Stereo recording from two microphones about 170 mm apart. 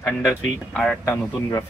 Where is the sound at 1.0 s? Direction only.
15° left (ahead or behind).